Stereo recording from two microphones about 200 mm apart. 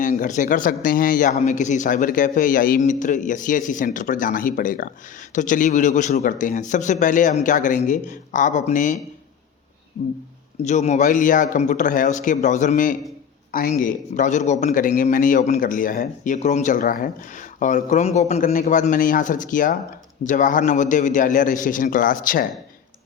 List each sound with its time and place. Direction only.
0.0 s speech: 40° left (ahead or behind)
10.6 s speech: 35° left (ahead or behind)